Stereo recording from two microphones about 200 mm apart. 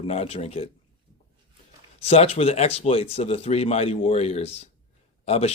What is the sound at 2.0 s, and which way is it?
Speech, 30° left (ahead or behind).